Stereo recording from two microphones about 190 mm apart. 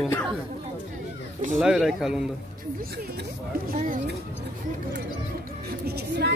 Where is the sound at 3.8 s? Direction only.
45° right (ahead or behind).